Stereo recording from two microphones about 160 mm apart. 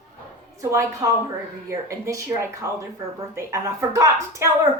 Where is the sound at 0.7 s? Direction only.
20° right (ahead or behind).